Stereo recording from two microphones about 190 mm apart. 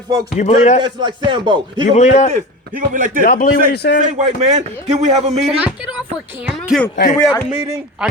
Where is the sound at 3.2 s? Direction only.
50° left (ahead or behind).